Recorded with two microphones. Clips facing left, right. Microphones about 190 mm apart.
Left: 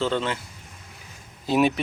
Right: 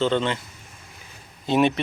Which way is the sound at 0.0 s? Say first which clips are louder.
Right 3 dB; 5° left (ahead or behind).